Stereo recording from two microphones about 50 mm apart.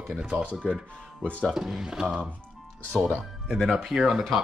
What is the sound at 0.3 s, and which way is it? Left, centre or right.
Speech, right.